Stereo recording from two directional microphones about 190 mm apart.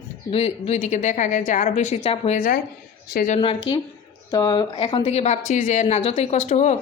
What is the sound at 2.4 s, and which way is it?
A woman's voice, 45° left (ahead or behind).